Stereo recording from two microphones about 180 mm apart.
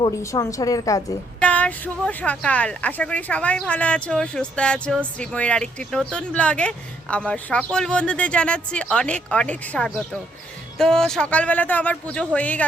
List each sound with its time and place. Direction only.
0.0 s a woman's voice: 20° left (ahead or behind)
1.4 s speech: 5° left (ahead or behind)